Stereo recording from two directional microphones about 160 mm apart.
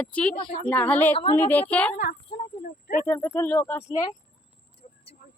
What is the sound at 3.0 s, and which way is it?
A woman's voice, 15° left (ahead or behind).